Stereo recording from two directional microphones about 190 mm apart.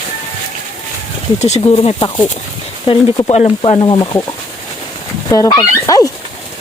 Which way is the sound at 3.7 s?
25° left (ahead or behind).